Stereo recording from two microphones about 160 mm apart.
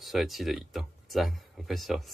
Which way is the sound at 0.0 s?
Centre (ahead or behind).